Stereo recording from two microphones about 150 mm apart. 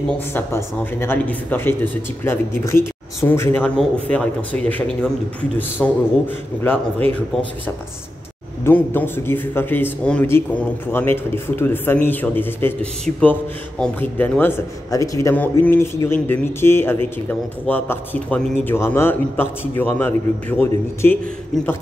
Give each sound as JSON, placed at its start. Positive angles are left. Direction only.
{"t": 0.3, "sound": "a man's voice", "side_deg": 15}
{"t": 8.6, "sound": "a man's voice", "side_deg": 15}